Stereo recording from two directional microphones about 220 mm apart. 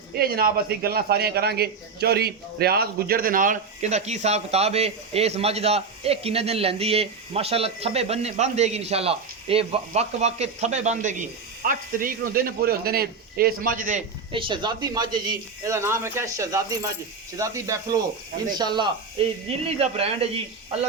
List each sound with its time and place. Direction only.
0.2 s speech: 45° right (ahead or behind)
14.3 s speech: 20° right (ahead or behind)